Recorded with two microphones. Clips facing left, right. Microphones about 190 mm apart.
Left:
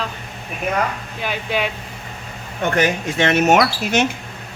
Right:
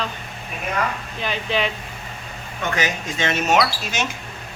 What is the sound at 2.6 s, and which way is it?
Speech, 55° left (ahead or behind).